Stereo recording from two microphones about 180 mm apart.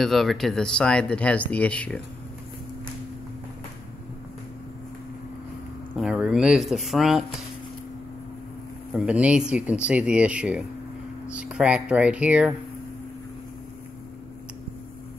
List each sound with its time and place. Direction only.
0.0 s speech: centre (ahead or behind)
5.9 s speech: 5° right (ahead or behind)
8.9 s speech: 5° right (ahead or behind)